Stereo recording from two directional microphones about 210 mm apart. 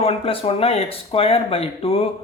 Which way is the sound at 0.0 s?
30° left (ahead or behind).